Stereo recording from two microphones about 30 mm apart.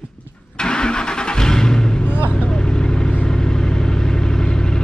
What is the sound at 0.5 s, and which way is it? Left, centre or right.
Vehicle, left.